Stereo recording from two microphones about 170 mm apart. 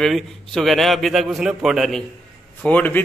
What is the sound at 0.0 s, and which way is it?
A man's voice, centre (ahead or behind).